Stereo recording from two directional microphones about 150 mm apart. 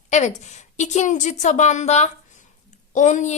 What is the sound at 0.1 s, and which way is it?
A woman's voice, 50° left (ahead or behind).